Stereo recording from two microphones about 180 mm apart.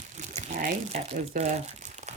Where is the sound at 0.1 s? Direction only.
40° right (ahead or behind).